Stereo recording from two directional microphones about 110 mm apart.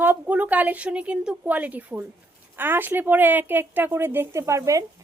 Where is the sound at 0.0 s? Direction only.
15° right (ahead or behind).